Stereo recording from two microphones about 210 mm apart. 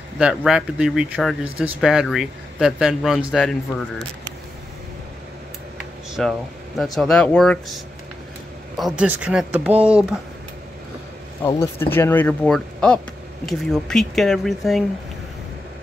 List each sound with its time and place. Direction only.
0.2 s speech: 5° right (ahead or behind)
5.8 s a sound: centre (ahead or behind)
6.8 s speech: centre (ahead or behind)
8.7 s speech: centre (ahead or behind)
11.4 s speech: 10° left (ahead or behind)